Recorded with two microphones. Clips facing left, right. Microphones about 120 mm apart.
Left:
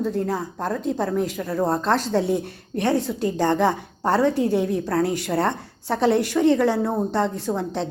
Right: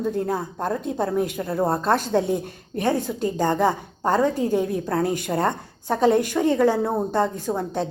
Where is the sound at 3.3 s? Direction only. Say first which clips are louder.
Left 1 dB; 10° right (ahead or behind).